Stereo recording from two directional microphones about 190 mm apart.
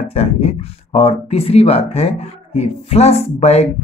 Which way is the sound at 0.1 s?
30° left (ahead or behind).